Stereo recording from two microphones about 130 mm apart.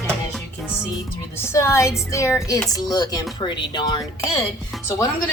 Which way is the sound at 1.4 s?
20° left (ahead or behind).